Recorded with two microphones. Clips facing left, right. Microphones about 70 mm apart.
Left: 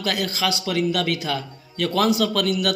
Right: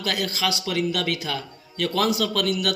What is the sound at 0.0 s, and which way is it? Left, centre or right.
A man's voice, left.